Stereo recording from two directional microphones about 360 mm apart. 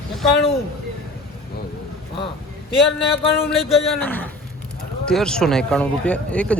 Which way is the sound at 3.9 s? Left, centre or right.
Centre.